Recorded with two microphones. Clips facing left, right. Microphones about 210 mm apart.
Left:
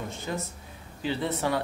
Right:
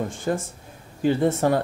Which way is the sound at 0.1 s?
50° right (ahead or behind).